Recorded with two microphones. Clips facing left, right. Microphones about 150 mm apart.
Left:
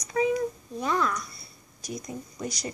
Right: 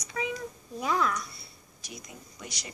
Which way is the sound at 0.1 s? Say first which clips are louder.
Left 9 dB; 40° left (ahead or behind).